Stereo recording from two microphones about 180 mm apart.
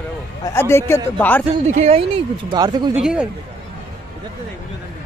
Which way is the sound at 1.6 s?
35° right (ahead or behind).